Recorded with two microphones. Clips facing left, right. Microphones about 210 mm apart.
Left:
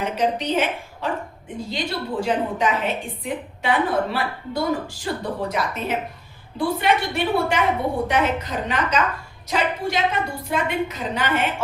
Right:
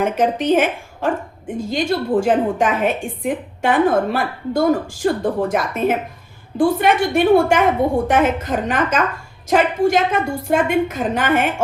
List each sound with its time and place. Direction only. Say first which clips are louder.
0.0 s a woman's voice: right 5 dB; 50° right (ahead or behind)